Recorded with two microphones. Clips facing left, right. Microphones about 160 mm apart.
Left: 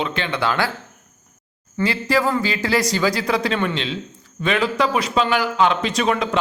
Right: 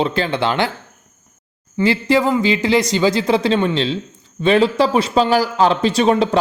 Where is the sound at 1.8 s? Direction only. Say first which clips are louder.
Right 5 dB; 25° right (ahead or behind).